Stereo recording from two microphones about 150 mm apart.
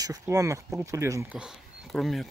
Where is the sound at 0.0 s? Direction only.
25° right (ahead or behind).